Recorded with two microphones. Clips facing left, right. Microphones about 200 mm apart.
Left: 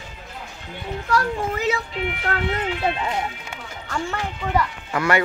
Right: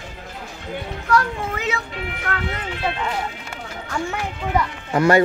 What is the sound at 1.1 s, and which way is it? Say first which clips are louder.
Speech: right 1 dB; 35° left (ahead or behind).